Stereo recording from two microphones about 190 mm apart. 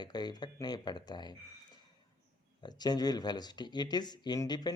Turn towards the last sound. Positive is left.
turn(degrees=20)  # may be behind; listen again after turning